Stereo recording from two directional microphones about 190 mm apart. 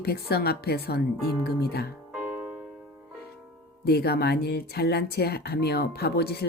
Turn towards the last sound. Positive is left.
turn(degrees=60)  # may be behind; listen again after turning